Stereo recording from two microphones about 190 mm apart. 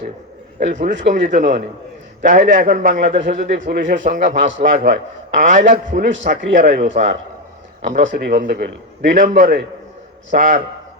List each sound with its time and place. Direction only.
0.6 s a man's voice: 40° right (ahead or behind)
6.0 s a man's voice: 75° right (ahead or behind)
6.2 s a man's voice: 45° right (ahead or behind)
7.9 s a man's voice: 40° right (ahead or behind)